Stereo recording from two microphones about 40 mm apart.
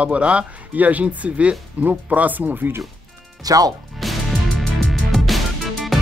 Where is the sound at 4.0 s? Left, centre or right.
Centre.